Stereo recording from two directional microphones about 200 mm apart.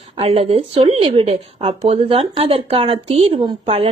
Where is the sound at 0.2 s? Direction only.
30° right (ahead or behind).